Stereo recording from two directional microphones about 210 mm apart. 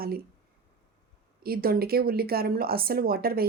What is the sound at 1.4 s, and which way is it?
Speech, 45° right (ahead or behind).